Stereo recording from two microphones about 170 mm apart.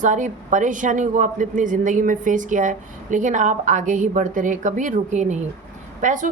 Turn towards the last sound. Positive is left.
turn(degrees=-50)  # may be behind; listen again after turning